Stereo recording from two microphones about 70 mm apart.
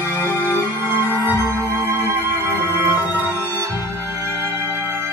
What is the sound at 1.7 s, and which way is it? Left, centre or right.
Music, right.